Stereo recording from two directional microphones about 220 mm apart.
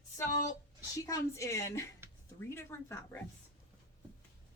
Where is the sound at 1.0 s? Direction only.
15° left (ahead or behind).